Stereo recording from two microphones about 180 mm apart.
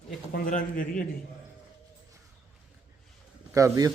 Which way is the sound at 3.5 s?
20° right (ahead or behind).